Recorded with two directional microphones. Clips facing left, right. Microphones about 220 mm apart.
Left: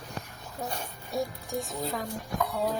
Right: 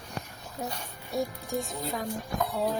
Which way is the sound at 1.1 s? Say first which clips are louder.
Right 1 dB; centre (ahead or behind).